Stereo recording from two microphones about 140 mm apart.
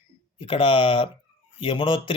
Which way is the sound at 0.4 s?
40° left (ahead or behind).